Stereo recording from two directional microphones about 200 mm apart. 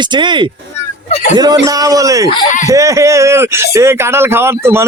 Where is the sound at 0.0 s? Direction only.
25° right (ahead or behind).